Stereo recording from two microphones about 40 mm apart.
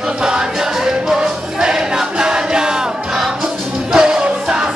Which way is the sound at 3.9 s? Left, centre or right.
Centre.